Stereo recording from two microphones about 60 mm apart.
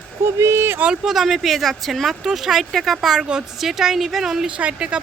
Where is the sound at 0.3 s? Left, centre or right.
Right.